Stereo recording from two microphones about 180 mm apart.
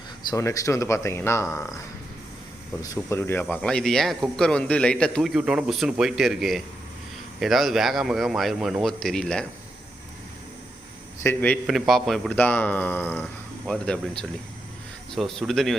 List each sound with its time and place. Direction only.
0.3 s a man's voice: 20° left (ahead or behind)
2.8 s a man's voice: 15° left (ahead or behind)
11.2 s a man's voice: 10° left (ahead or behind)
11.6 s a man's voice: centre (ahead or behind)
15.1 s a man's voice: centre (ahead or behind)